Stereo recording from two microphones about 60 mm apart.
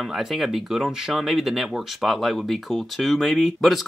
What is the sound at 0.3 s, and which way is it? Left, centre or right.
Speech, centre.